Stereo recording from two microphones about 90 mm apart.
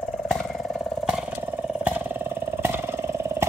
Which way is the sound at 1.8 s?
20° right (ahead or behind).